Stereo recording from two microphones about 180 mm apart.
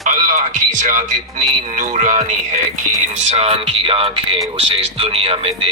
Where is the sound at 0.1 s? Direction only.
45° right (ahead or behind).